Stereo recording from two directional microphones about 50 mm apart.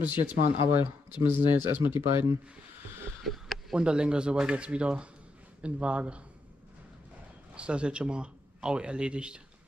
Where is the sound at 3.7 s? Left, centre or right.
Centre.